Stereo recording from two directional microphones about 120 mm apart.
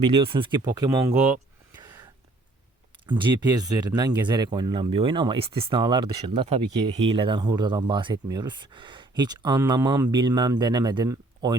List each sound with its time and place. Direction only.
0.1 s speech: 40° right (ahead or behind)
0.7 s speech: 30° right (ahead or behind)
1.7 s whispering: 30° right (ahead or behind)
3.1 s speech: 40° right (ahead or behind)